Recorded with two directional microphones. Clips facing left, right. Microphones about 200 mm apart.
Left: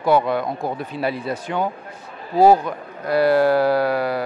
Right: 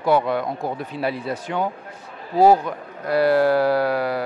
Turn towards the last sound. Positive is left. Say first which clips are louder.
# left 1 dB
turn(degrees=10)  # may be behind; listen again after turning